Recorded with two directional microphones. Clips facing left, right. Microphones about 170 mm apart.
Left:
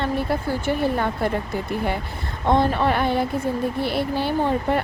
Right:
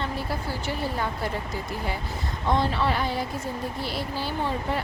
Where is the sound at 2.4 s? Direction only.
55° left (ahead or behind).